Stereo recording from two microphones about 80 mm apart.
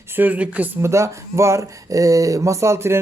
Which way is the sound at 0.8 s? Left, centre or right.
Right.